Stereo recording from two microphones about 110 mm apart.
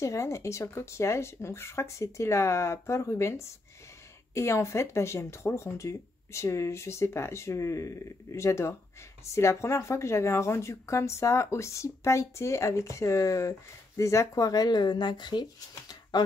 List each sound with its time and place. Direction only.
0.0 s speech: 30° left (ahead or behind)